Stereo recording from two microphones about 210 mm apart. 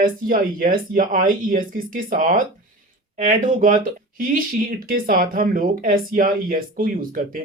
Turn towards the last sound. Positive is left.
turn(degrees=-40)  # may be behind; listen again after turning